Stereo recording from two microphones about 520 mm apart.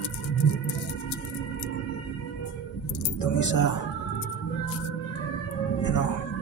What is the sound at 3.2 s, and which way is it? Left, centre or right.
Speech, left.